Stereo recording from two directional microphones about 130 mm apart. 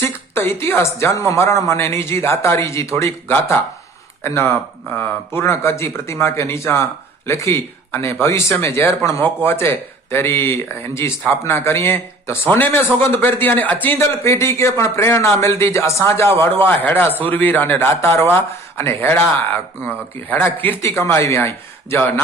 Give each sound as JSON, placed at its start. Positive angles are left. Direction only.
{"t": 0.0, "sound": "a woman's voice", "side_deg": 20}
{"t": 20.3, "sound": "speech", "side_deg": 15}